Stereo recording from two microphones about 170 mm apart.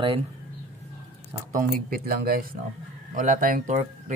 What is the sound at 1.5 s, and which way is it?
Speech, 55° right (ahead or behind).